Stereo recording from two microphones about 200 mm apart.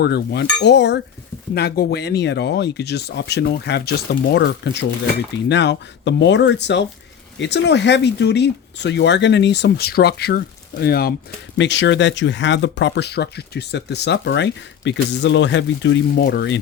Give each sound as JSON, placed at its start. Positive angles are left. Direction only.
{"t": 0.0, "sound": "speech", "side_deg": 55}
{"t": 11.5, "sound": "speech", "side_deg": 60}